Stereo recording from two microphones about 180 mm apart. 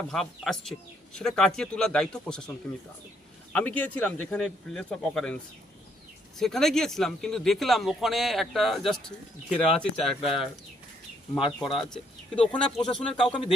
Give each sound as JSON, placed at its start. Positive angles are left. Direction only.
{"t": 0.1, "sound": "speech", "side_deg": 0}
{"t": 3.5, "sound": "speech", "side_deg": 10}
{"t": 6.4, "sound": "speech", "side_deg": 0}
{"t": 11.3, "sound": "speech", "side_deg": 30}
{"t": 12.4, "sound": "speech", "side_deg": 5}